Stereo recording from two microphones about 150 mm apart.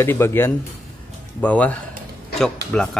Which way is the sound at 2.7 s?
5° left (ahead or behind).